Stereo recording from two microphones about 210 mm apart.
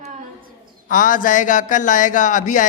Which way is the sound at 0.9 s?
40° left (ahead or behind).